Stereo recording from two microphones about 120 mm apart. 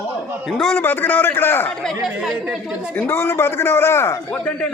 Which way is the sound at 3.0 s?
20° left (ahead or behind).